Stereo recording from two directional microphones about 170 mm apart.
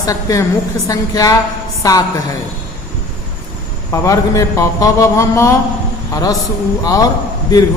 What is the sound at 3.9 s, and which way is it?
A man's voice, 20° left (ahead or behind).